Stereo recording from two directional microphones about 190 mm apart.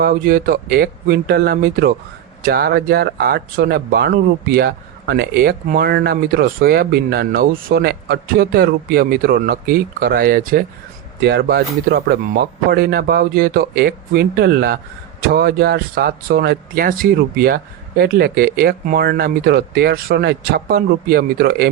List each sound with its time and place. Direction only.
0.0 s speech: 50° right (ahead or behind)
11.2 s speech: 60° right (ahead or behind)